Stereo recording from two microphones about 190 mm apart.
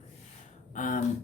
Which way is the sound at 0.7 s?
45° left (ahead or behind).